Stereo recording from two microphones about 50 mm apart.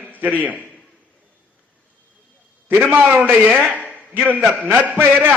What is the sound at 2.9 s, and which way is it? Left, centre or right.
Speech, right.